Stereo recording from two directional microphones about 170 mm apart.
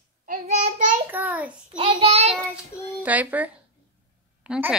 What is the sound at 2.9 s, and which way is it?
A child's voice, 10° right (ahead or behind).